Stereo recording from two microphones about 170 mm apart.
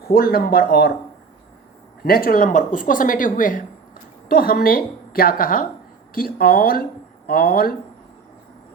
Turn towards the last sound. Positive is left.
turn(degrees=60)  # may be behind; listen again after turning